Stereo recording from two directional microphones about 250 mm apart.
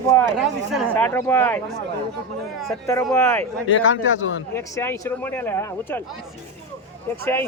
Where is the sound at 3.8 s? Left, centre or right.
Left.